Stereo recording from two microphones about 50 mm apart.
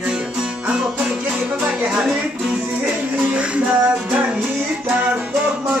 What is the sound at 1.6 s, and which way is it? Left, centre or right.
Speech, centre.